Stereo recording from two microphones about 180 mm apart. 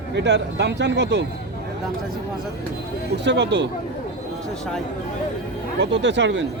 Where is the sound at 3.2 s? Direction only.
75° right (ahead or behind).